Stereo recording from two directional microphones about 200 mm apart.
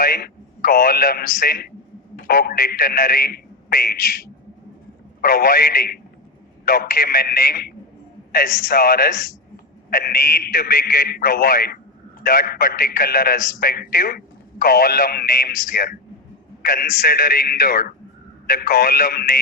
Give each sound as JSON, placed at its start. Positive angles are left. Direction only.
{"t": 0.0, "sound": "a man's voice", "side_deg": 45}
{"t": 5.2, "sound": "a man's voice", "side_deg": 45}